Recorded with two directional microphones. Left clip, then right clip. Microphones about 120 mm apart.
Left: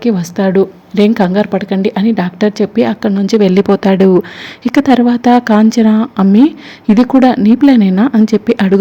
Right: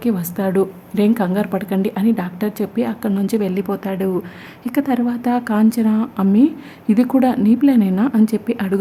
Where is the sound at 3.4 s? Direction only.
40° left (ahead or behind).